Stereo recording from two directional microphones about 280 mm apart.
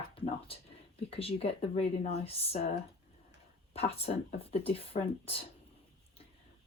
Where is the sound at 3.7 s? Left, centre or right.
Left.